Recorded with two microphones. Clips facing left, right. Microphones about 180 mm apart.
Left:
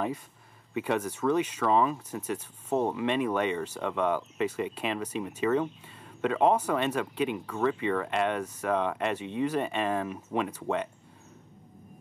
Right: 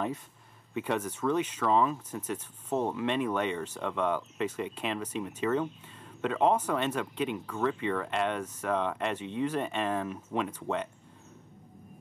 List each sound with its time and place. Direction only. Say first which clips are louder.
0.7 s speech: left 2 dB; 10° left (ahead or behind)